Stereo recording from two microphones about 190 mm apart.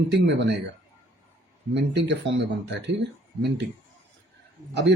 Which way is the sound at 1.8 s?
70° right (ahead or behind).